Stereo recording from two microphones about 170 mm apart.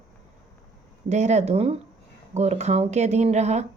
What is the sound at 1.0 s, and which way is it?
Speech, 40° right (ahead or behind).